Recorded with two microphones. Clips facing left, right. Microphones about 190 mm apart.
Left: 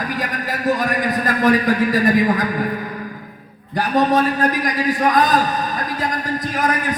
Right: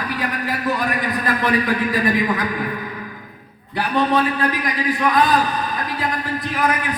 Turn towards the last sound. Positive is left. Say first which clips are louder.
# left 1 dB
turn(degrees=45)  # may be behind; listen again after turning